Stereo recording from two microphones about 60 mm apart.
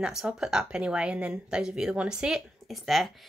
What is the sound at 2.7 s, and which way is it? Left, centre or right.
Speech, centre.